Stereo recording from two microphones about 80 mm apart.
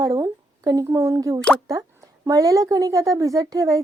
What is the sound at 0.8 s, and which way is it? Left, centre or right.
Speech, right.